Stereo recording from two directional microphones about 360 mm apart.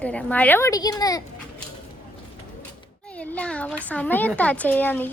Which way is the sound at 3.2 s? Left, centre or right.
Centre.